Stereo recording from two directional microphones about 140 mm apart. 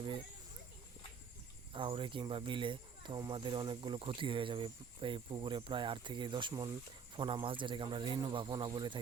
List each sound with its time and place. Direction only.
1.7 s speech: 35° right (ahead or behind)